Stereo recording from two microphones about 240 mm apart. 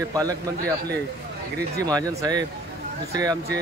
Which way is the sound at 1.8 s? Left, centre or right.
Centre.